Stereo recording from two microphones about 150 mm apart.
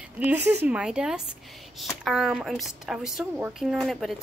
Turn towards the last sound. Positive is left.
turn(degrees=0)  # may be behind; listen again after turning